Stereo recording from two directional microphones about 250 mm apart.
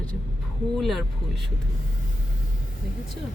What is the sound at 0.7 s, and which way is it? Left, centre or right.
Speech, centre.